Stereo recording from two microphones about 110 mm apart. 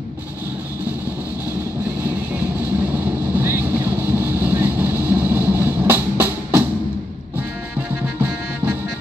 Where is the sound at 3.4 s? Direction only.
20° right (ahead or behind).